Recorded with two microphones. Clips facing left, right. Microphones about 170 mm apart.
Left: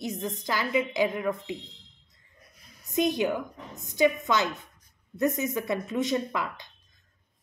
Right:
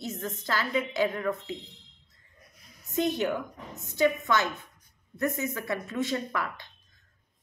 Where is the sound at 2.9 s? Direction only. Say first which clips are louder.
Left 2 dB; 15° left (ahead or behind).